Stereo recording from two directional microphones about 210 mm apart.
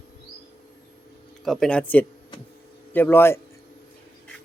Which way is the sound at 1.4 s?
Centre (ahead or behind).